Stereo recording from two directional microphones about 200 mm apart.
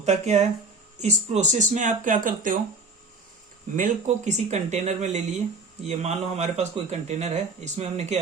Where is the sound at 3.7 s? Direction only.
40° right (ahead or behind).